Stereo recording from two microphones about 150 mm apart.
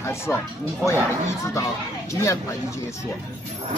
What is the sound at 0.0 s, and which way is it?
Speech, 15° left (ahead or behind).